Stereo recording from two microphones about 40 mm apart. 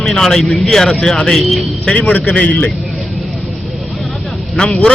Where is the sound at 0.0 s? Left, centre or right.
Centre.